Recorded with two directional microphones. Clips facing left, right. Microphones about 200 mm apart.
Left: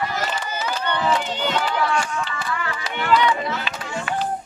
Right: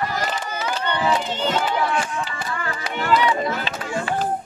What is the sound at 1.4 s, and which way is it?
Run, 25° right (ahead or behind).